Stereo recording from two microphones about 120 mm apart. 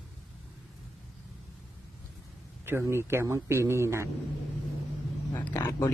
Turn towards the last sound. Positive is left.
turn(degrees=20)  # may be behind; listen again after turning